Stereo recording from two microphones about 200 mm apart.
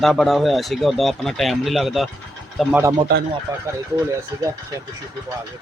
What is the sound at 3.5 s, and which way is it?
Speech, 20° right (ahead or behind).